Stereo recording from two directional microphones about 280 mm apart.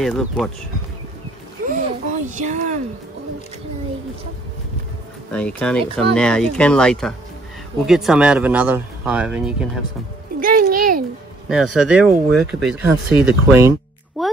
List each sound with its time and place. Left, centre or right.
0.0 s speech: centre
1.7 s a sound: right
5.3 s speech: centre
10.4 s a sound: right
11.4 s speech: centre
14.2 s music: centre